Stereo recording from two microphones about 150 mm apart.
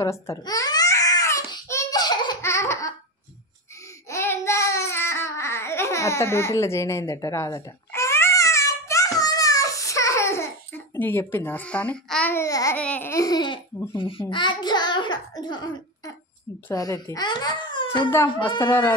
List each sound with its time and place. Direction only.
0.0 s babbling: 20° left (ahead or behind)
4.1 s babbling: 15° left (ahead or behind)
11.0 s a child's voice: 15° left (ahead or behind)
12.4 s a child's voice: 25° left (ahead or behind)
12.7 s a child's voice: 10° left (ahead or behind); by 18.6 s 30° left (ahead or behind)
18.6 s a child's voice: 15° left (ahead or behind)